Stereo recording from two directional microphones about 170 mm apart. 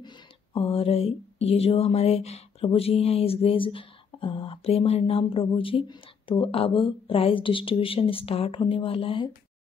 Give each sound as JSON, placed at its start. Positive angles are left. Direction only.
{"t": 0.0, "sound": "speech", "side_deg": 30}